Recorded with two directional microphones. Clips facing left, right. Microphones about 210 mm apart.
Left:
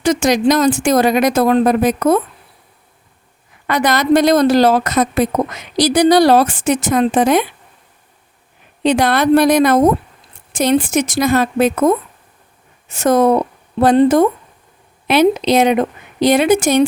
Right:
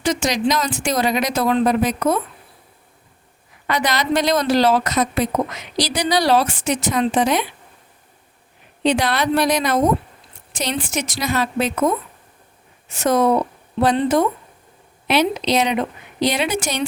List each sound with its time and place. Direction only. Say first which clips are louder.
0.0 s a woman's voice: left 6 dB; 50° left (ahead or behind)
3.7 s a woman's voice: left 7 dB; 50° left (ahead or behind)
8.8 s a woman's voice: left 5 dB; 50° left (ahead or behind)